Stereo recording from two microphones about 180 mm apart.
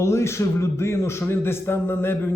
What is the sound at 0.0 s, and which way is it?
A man's voice, 15° left (ahead or behind).